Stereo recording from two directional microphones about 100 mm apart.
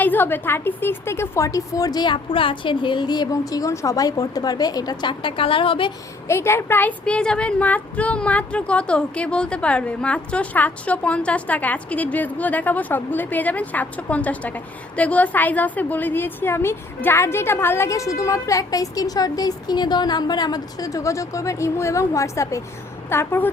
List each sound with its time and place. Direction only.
0.0 s a woman's voice: 20° left (ahead or behind); by 5.9 s 60° left (ahead or behind)
6.2 s a woman's voice: 25° left (ahead or behind)
7.0 s a woman's voice: 10° left (ahead or behind)